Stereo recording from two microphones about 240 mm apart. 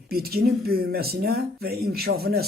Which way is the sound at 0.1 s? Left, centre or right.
Right.